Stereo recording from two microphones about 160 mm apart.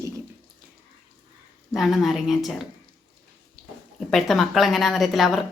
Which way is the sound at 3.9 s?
Centre (ahead or behind).